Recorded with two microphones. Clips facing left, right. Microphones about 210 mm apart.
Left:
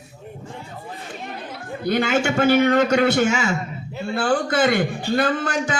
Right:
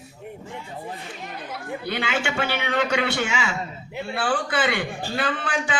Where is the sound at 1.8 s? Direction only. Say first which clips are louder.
Left 8 dB; 45° left (ahead or behind).